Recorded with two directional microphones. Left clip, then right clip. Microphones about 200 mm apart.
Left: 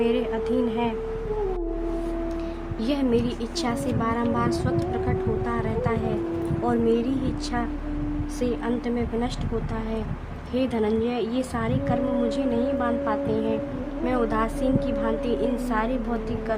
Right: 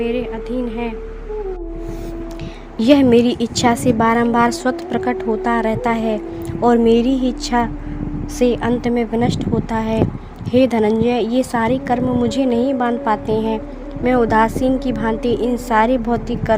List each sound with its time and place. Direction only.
0.0 s speech: 5° right (ahead or behind)
2.7 s a woman's voice: 35° right (ahead or behind)